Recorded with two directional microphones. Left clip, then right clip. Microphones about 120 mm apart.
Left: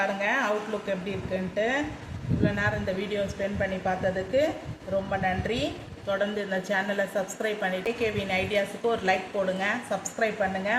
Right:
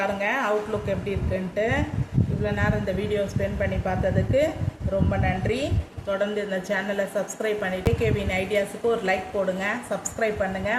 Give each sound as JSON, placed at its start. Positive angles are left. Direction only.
{"t": 0.0, "sound": "a woman's voice", "side_deg": -20}